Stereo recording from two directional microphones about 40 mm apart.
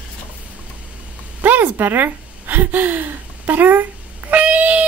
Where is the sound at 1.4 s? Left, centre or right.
Right.